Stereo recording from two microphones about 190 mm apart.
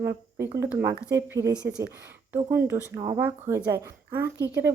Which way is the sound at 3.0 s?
25° right (ahead or behind).